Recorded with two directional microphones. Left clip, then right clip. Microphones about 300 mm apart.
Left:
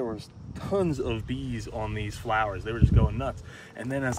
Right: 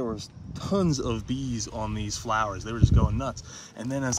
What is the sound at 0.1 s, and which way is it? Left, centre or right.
Speech, right.